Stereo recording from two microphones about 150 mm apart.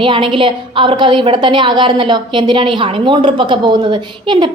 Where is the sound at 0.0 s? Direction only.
35° right (ahead or behind).